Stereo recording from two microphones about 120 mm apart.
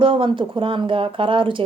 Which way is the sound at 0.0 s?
45° right (ahead or behind).